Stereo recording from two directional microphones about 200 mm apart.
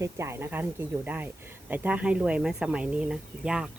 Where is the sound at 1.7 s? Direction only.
10° right (ahead or behind).